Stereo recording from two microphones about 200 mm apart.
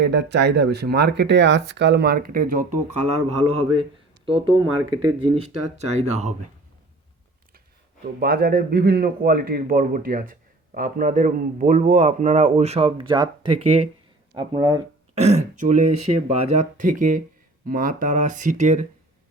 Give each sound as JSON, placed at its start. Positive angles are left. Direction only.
{"t": 0.0, "sound": "a man's voice", "side_deg": -60}
{"t": 8.0, "sound": "a man's voice", "side_deg": -50}
{"t": 15.1, "sound": "a man's voice", "side_deg": -35}